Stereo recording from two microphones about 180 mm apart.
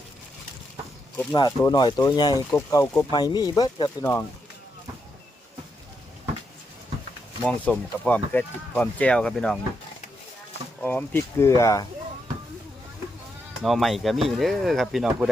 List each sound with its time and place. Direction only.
1.1 s speech: 15° left (ahead or behind)
1.4 s speech: 25° left (ahead or behind)
7.4 s speech: 10° left (ahead or behind)
10.8 s speech: 10° left (ahead or behind)
13.6 s speech: centre (ahead or behind)